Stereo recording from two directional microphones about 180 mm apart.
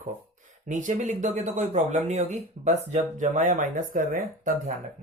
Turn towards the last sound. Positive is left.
turn(degrees=-45)  # may be behind; listen again after turning